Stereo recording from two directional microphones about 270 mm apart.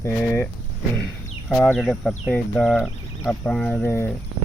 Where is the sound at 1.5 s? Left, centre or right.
Centre.